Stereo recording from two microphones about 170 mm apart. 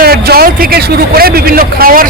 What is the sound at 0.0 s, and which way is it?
A man's voice, 65° right (ahead or behind).